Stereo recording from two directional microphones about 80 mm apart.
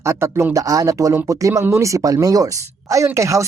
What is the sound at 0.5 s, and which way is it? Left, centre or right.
Speech, right.